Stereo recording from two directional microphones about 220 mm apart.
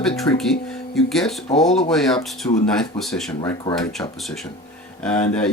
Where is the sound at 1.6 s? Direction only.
Centre (ahead or behind).